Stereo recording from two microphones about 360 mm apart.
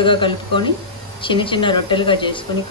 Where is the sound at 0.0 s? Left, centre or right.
Centre.